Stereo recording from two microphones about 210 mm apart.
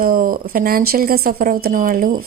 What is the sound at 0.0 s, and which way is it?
Speech, 40° right (ahead or behind).